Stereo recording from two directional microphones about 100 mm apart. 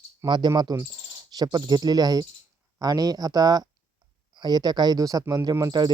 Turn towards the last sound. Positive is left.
turn(degrees=-40)  # may be behind; listen again after turning